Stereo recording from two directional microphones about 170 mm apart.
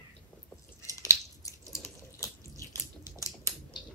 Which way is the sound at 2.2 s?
15° left (ahead or behind).